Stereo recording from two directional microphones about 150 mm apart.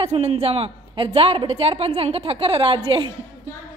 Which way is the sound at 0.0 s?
45° right (ahead or behind).